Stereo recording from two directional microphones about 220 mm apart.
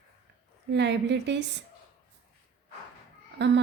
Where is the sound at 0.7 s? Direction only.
50° right (ahead or behind).